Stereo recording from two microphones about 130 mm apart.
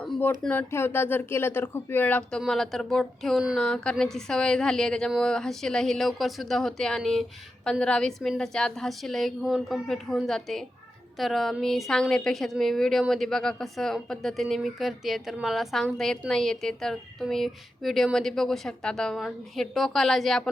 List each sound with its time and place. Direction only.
0.2 s speech: 15° left (ahead or behind)
2.4 s speech: centre (ahead or behind)